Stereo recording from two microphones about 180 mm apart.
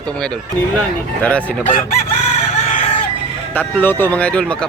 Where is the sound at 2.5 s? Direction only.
40° left (ahead or behind).